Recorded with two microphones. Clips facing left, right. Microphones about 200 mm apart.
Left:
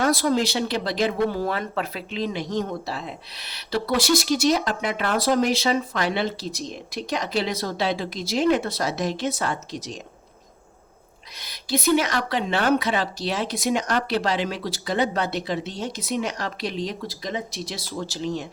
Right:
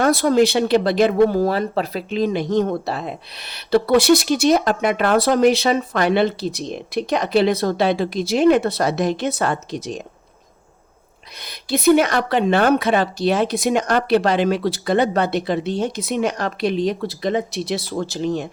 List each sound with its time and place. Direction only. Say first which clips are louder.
0.0 s speech: right 6 dB; 55° right (ahead or behind)
1.4 s speech: right 7 dB; 35° right (ahead or behind); by 10.0 s 60° right (ahead or behind)
11.3 s speech: right 3 dB; 60° right (ahead or behind)